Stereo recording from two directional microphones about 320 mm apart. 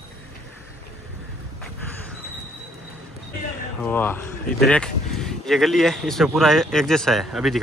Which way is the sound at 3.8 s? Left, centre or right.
Centre.